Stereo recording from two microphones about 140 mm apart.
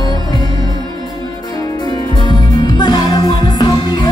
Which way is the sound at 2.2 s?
30° left (ahead or behind).